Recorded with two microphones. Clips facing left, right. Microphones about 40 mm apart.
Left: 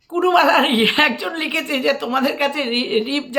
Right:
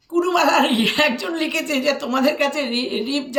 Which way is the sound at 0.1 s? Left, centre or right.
Left.